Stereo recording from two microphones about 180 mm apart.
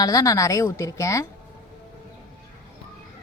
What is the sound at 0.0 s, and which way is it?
Speech, 20° left (ahead or behind).